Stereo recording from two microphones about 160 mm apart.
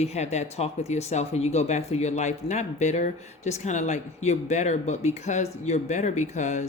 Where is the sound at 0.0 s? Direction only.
45° left (ahead or behind).